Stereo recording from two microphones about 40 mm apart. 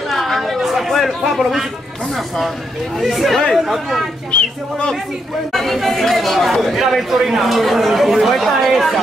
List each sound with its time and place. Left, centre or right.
0.1 s chatter: centre
2.1 s speech: centre
4.3 s speech: left
5.5 s speech: centre